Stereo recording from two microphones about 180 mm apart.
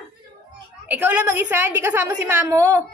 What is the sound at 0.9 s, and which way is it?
A woman's voice, 10° right (ahead or behind).